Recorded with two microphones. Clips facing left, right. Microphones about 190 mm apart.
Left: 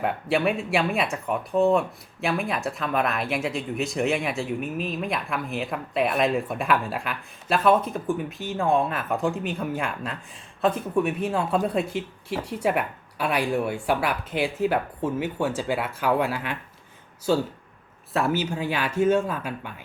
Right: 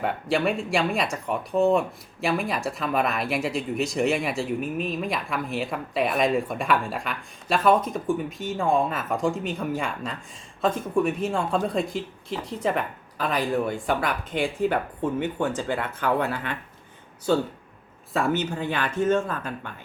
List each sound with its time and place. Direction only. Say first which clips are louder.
0.0 s speech: left 1 dB; 5° left (ahead or behind)
18.1 s speech: even; 5° left (ahead or behind)